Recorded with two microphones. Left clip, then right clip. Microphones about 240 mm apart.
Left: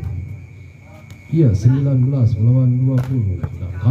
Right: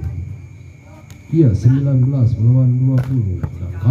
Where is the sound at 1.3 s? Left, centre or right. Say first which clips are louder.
Right 2 dB; left.